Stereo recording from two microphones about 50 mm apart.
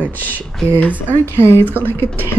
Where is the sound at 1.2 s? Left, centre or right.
Left.